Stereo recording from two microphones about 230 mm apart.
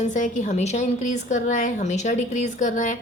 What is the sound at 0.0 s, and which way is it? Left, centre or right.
A woman's voice, left.